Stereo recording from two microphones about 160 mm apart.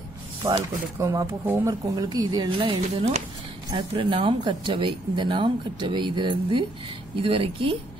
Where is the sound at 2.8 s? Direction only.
45° right (ahead or behind).